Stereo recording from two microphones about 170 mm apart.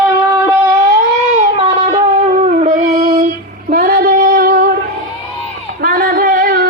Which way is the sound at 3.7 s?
55° right (ahead or behind).